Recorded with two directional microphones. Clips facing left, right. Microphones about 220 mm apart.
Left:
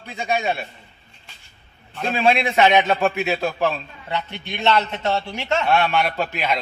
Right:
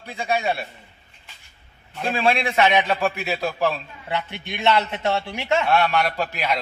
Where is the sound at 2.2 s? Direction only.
25° left (ahead or behind).